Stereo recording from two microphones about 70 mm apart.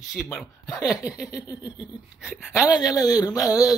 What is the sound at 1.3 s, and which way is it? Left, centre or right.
Speech, left.